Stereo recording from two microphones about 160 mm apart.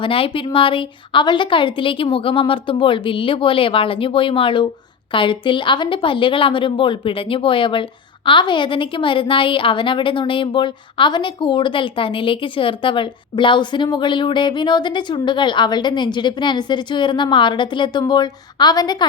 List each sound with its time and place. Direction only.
0.0 s a woman's voice: 35° left (ahead or behind)